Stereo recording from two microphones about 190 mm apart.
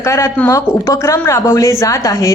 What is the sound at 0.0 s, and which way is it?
A woman's voice, 15° left (ahead or behind).